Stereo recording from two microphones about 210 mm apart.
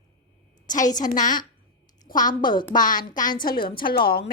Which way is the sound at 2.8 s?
40° left (ahead or behind).